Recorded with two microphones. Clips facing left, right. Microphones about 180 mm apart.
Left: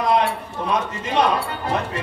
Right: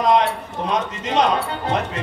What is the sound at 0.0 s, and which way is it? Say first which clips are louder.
Speech: right 2 dB; 20° right (ahead or behind).